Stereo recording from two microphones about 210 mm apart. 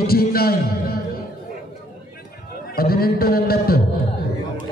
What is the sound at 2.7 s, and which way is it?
A man's voice, 45° left (ahead or behind).